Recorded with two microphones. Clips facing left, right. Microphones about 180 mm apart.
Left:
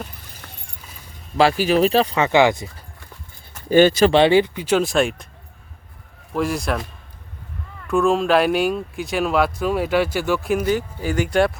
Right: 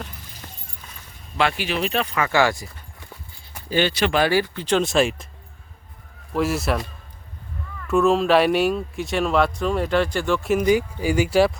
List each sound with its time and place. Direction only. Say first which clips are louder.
1.4 s speech: left 7 dB; 35° left (ahead or behind); by 2.6 s 20° left (ahead or behind)
3.7 s speech: left 8 dB; 45° left (ahead or behind)
4.1 s speech: left 5 dB; 25° left (ahead or behind)
4.6 s speech: left 1 dB; 5° left (ahead or behind)
6.3 s speech: even; 5° right (ahead or behind)
7.9 s speech: even; centre (ahead or behind)
10.7 s speech: right 2 dB; 10° right (ahead or behind)